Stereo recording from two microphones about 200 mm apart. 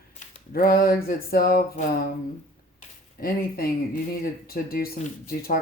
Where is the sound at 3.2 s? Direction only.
50° left (ahead or behind).